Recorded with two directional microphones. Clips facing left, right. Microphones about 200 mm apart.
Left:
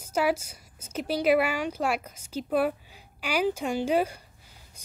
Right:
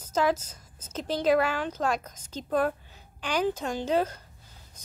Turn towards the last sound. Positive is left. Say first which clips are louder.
# left 1 dB
turn(degrees=10)  # may be behind; listen again after turning